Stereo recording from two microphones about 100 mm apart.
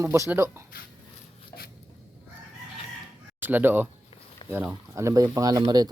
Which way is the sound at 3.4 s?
20° right (ahead or behind).